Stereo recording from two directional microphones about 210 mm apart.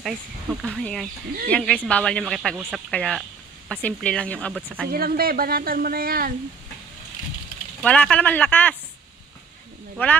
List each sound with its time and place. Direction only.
0.0 s speech: centre (ahead or behind)
4.9 s speech: 45° right (ahead or behind)
7.8 s speech: 5° left (ahead or behind)
10.0 s speech: 10° left (ahead or behind)